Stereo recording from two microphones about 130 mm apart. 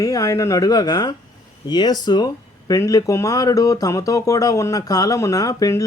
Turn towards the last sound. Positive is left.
turn(degrees=25)  # may be behind; listen again after turning